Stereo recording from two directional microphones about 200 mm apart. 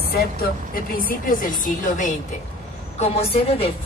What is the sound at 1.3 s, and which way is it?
Speech, 45° left (ahead or behind).